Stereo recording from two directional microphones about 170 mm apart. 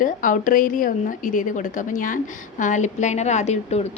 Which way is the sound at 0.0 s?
50° left (ahead or behind).